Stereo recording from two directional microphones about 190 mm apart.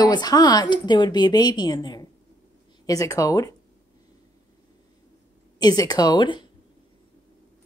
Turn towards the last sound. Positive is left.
turn(degrees=25)  # may be behind; listen again after turning